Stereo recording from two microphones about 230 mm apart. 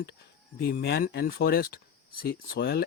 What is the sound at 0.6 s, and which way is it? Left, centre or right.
Speech, left.